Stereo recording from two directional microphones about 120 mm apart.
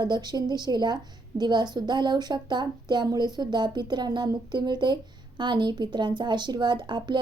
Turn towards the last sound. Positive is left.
turn(degrees=-40)  # may be behind; listen again after turning